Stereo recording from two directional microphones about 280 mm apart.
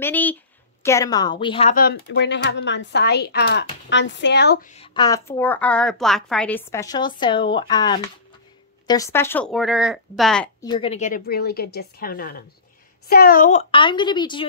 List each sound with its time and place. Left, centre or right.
0.0 s a woman's voice: centre
1.8 s a woman's voice: left; by 10.5 s centre
10.6 s a woman's voice: centre